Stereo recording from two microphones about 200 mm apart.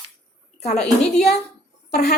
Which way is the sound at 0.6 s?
30° left (ahead or behind).